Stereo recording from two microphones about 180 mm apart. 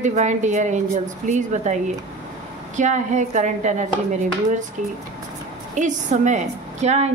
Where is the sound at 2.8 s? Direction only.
40° right (ahead or behind).